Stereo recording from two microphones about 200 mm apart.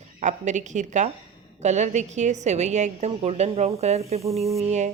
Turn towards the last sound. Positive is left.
turn(degrees=-35)  # may be behind; listen again after turning